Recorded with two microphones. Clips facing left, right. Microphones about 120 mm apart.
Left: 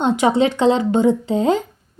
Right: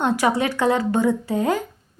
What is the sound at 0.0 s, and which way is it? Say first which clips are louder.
A woman's voice: left 4 dB; 20° left (ahead or behind).